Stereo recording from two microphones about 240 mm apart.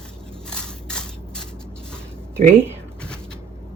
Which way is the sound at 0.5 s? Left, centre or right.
Centre.